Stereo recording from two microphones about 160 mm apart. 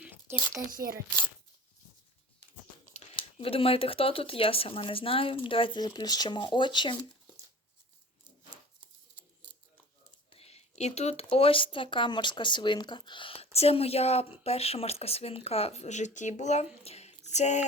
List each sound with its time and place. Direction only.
0.0 s a sound: 10° right (ahead or behind)
0.7 s speech: 60° right (ahead or behind)
3.2 s speech: 35° left (ahead or behind)
10.2 s speech: 40° left (ahead or behind)
16.8 s female singing: 40° left (ahead or behind)